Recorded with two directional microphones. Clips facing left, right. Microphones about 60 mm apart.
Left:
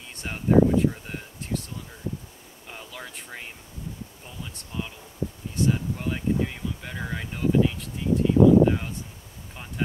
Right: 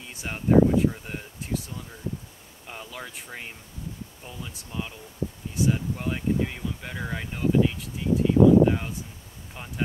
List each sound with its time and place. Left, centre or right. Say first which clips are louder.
0.1 s speech: even; centre
2.7 s speech: right 1 dB; centre